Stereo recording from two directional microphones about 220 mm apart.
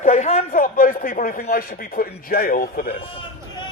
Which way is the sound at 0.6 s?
40° left (ahead or behind).